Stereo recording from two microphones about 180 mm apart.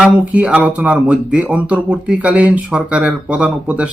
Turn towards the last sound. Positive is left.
turn(degrees=-5)  # may be behind; listen again after turning